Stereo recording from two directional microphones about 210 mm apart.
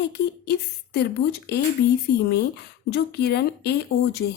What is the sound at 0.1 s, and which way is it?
Speech, 50° left (ahead or behind).